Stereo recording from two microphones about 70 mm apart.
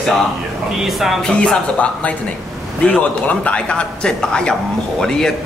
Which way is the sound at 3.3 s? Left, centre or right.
Centre.